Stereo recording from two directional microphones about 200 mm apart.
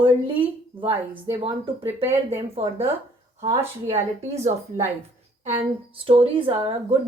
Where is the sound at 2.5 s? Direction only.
30° right (ahead or behind).